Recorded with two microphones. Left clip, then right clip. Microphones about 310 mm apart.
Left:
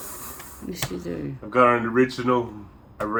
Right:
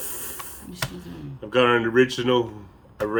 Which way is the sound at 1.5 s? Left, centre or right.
Right.